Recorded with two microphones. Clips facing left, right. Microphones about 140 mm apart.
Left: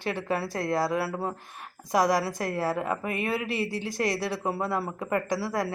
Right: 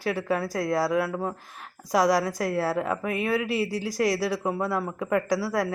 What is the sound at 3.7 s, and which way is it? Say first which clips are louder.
Speech: right 2 dB; 90° right.